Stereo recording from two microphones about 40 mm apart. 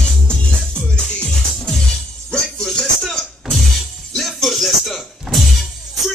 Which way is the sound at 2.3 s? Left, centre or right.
Centre.